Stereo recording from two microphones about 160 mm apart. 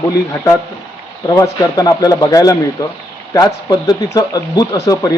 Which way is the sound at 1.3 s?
20° left (ahead or behind).